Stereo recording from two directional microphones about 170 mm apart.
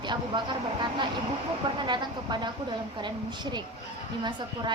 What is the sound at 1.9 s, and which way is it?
A woman's voice, 25° right (ahead or behind).